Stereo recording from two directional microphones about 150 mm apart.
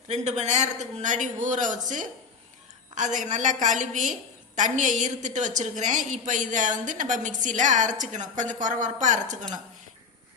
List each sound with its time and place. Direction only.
0.1 s a man's voice: 50° right (ahead or behind)